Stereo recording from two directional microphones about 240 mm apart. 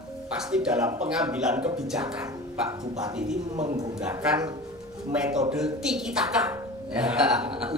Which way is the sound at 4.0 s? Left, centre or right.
Centre.